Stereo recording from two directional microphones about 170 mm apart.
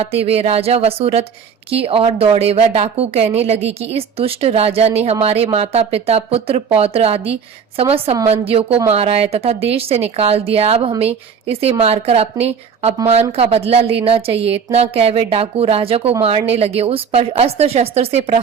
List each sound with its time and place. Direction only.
0.0 s a woman's voice: 35° right (ahead or behind)